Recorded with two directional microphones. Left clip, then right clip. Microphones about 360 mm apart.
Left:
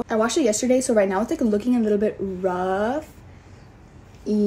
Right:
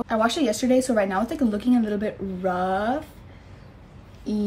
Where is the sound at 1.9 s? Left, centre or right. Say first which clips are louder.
Left 6 dB; left.